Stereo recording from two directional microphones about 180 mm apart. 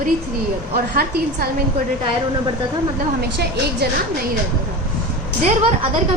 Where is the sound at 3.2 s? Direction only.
65° right (ahead or behind).